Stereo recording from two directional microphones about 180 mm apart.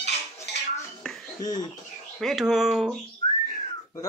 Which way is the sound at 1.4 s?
20° left (ahead or behind).